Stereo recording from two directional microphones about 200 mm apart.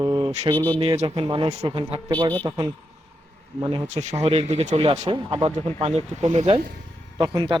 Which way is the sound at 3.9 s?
35° right (ahead or behind).